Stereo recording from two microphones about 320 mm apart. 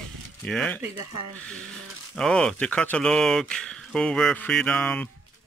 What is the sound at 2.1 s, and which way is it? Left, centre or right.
Speech, centre.